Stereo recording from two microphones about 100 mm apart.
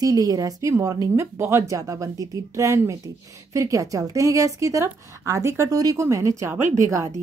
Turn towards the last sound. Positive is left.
turn(degrees=-30)  # may be behind; listen again after turning